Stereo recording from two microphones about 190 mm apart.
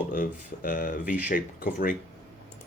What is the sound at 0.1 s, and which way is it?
Speech, 50° left (ahead or behind).